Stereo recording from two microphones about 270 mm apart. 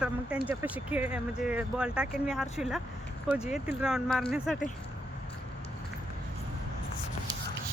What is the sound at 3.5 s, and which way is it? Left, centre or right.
Speech, centre.